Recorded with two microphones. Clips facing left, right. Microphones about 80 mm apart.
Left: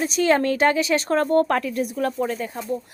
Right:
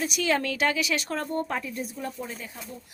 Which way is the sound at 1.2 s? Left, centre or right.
Left.